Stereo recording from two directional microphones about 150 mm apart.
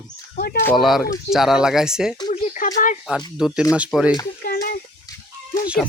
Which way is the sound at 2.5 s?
60° left (ahead or behind).